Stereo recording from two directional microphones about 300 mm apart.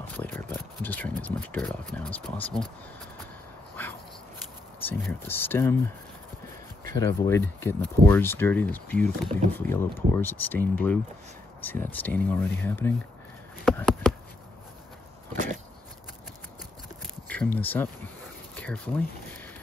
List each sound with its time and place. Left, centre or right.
0.1 s speech: centre
3.8 s dog: centre
4.8 s speech: centre
6.9 s speech: centre
11.6 s speech: centre
13.7 s a sound: centre
15.3 s a sound: right
17.3 s speech: centre